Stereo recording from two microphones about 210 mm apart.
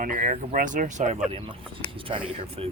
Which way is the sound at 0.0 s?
40° right (ahead or behind).